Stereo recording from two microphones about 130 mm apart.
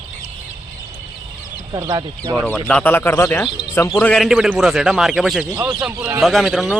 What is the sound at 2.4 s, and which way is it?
Speech, 10° left (ahead or behind).